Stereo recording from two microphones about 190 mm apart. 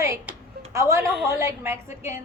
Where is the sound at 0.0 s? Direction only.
15° right (ahead or behind).